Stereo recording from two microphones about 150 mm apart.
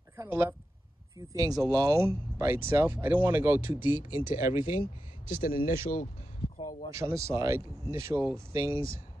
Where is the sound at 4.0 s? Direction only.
65° left (ahead or behind).